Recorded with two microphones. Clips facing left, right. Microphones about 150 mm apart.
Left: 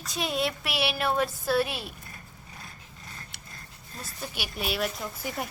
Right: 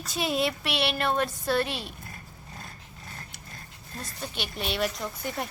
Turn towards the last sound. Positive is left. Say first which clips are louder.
# right 1 dB
turn(degrees=5)  # may be behind; listen again after turning